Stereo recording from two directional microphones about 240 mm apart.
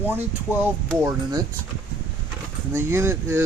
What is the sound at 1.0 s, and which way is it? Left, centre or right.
Speech, centre.